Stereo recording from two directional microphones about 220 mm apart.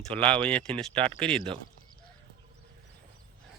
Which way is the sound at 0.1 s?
25° right (ahead or behind).